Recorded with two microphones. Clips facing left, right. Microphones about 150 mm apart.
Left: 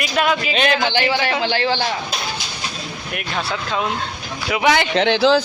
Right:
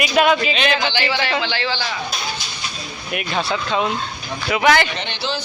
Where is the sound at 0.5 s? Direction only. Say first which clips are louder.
Left 2 dB; 50° left (ahead or behind).